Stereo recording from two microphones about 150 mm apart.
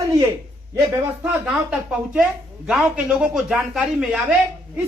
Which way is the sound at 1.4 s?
5° right (ahead or behind).